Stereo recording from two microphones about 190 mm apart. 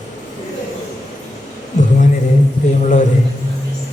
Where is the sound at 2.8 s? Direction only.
40° left (ahead or behind).